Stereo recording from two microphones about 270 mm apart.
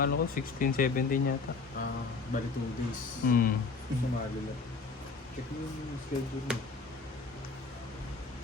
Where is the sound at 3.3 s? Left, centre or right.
Left.